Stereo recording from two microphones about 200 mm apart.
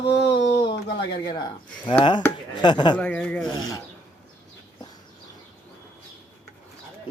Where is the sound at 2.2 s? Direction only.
20° left (ahead or behind).